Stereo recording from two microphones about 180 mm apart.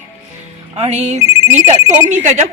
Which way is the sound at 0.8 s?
40° right (ahead or behind).